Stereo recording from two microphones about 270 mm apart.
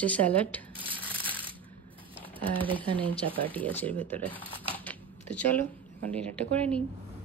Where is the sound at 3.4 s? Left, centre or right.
Centre.